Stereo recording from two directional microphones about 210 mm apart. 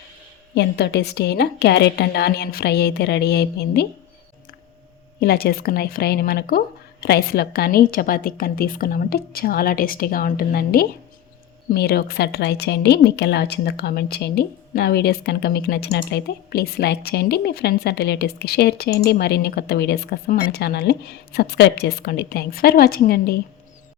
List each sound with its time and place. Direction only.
0.5 s a woman's voice: 55° left (ahead or behind)
5.2 s a woman's voice: 45° left (ahead or behind)